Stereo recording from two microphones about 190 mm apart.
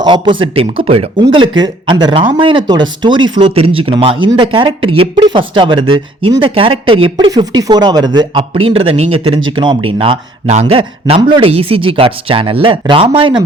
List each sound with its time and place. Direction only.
0.0 s speech: 25° right (ahead or behind)